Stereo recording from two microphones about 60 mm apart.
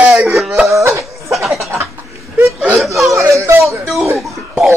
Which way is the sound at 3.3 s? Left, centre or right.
Right.